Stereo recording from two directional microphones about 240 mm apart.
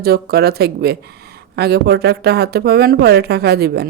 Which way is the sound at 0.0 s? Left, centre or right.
Right.